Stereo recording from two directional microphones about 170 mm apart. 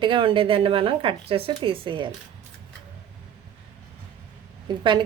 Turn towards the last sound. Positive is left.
turn(degrees=-30)  # may be behind; listen again after turning